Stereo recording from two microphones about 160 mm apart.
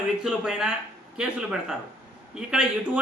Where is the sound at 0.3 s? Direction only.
5° right (ahead or behind).